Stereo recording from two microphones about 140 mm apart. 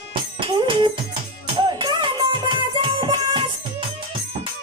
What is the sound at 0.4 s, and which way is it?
Music, 35° right (ahead or behind).